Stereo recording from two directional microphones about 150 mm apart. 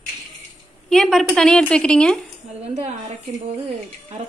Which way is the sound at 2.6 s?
50° right (ahead or behind).